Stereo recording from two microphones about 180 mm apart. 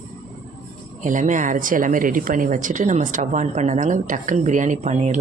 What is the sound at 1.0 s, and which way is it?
Speech, 45° right (ahead or behind).